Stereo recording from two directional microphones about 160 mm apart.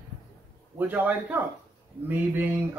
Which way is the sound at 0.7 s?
10° right (ahead or behind).